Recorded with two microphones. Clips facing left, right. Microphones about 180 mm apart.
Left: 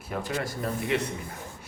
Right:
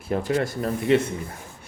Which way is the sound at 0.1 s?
30° right (ahead or behind).